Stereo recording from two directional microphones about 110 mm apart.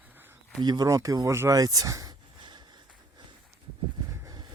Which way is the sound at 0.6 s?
35° right (ahead or behind).